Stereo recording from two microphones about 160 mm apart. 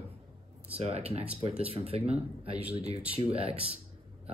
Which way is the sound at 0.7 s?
40° right (ahead or behind).